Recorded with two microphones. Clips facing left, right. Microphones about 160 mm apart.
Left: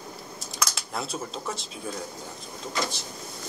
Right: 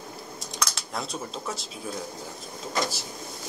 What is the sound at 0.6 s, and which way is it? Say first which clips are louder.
Speech: left 1 dB; centre (ahead or behind).